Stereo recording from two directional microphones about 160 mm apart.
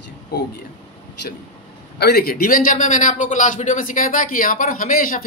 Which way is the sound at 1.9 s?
80° left.